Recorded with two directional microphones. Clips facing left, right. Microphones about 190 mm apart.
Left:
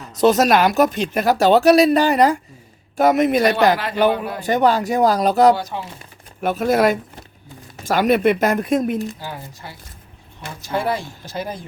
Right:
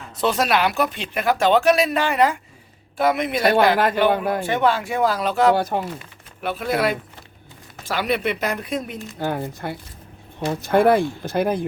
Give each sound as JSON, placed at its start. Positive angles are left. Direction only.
{"t": 0.2, "sound": "speech", "side_deg": 40}
{"t": 3.8, "sound": "a man's voice", "side_deg": -50}
{"t": 4.4, "sound": "speech", "side_deg": 40}
{"t": 5.5, "sound": "a man's voice", "side_deg": -55}
{"t": 6.4, "sound": "speech", "side_deg": 45}
{"t": 9.1, "sound": "speech", "side_deg": -55}